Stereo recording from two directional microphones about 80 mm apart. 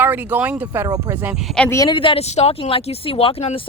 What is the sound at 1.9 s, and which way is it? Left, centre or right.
Speech, left.